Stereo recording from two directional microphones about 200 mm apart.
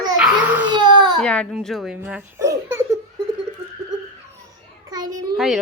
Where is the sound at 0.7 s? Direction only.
20° right (ahead or behind).